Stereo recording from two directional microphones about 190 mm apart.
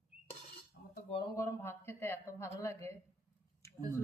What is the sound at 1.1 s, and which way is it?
Speech, 25° left (ahead or behind).